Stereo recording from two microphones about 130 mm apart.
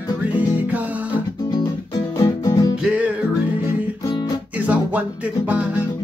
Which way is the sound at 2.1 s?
25° left (ahead or behind).